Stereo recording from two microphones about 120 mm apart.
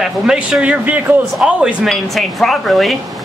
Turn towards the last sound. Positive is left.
turn(degrees=0)  # may be behind; listen again after turning